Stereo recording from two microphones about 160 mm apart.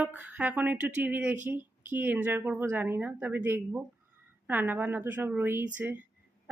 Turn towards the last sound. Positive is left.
turn(degrees=-10)  # may be behind; listen again after turning